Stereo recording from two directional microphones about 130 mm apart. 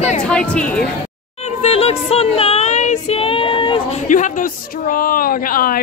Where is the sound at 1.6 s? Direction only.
50° left (ahead or behind).